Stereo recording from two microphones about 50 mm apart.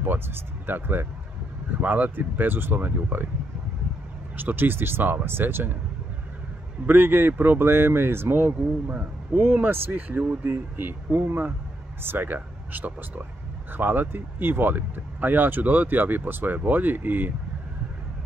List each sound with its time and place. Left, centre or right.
0.0 s speech: right
4.4 s speech: right
6.9 s speech: right
8.9 s speech: right